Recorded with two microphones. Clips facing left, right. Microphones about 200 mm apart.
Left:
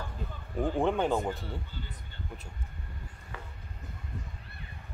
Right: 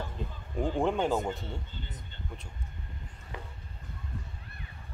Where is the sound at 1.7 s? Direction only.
20° right (ahead or behind).